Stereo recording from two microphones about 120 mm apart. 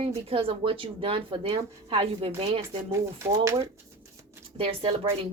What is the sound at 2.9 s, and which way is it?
Speech, 25° right (ahead or behind).